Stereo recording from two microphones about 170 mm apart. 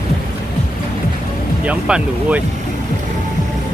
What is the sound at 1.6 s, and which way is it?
Speech, 5° right (ahead or behind).